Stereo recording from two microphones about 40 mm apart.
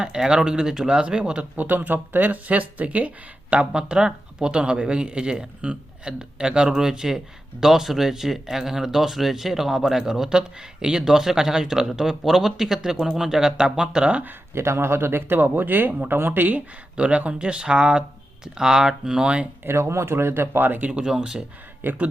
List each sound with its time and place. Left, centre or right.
0.0 s speech: centre
1.5 s speech: right
3.5 s speech: right
14.5 s speech: right
17.0 s speech: right
18.4 s speech: centre
19.6 s speech: right
21.0 s speech: right
21.8 s speech: right